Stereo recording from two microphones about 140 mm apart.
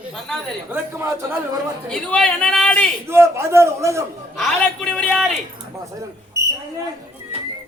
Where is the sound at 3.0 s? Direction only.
20° right (ahead or behind).